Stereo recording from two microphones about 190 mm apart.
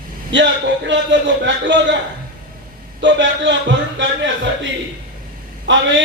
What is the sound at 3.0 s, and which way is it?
A man's voice, 70° right (ahead or behind).